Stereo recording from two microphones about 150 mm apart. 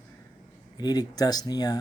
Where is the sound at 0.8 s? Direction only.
25° left (ahead or behind).